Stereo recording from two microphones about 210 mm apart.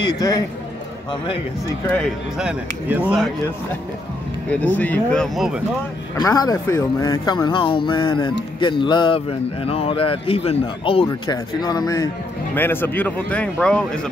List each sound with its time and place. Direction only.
0.0 s speech: 15° left (ahead or behind)
1.9 s speech: 5° left (ahead or behind)
2.4 s speech: 5° right (ahead or behind)
4.5 s speech: 10° left (ahead or behind)
6.1 s speech: 20° left (ahead or behind)